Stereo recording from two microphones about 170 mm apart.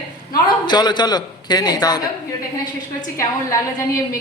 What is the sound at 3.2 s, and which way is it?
Speech, 20° left (ahead or behind).